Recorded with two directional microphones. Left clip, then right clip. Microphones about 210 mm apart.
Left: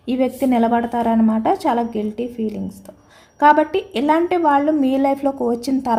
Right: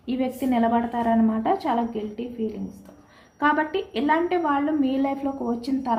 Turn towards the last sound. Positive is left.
turn(degrees=60)  # may be behind; listen again after turning